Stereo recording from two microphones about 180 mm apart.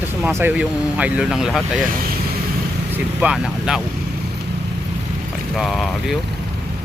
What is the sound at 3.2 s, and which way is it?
Speech, 5° right (ahead or behind).